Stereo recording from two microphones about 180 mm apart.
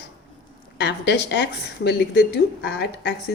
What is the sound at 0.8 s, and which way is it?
Speech, 70° left (ahead or behind).